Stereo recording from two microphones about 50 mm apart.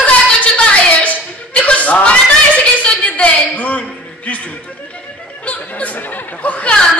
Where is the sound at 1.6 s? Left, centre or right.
Left.